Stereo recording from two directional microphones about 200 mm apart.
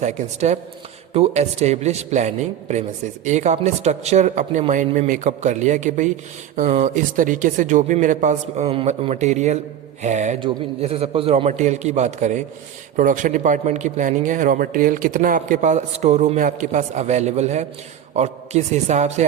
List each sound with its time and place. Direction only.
0.0 s a man's voice: 35° right (ahead or behind)